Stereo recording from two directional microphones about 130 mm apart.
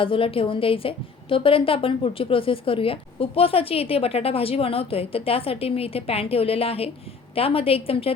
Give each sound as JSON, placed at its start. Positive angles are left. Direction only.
{"t": 0.0, "sound": "a woman's voice", "side_deg": 45}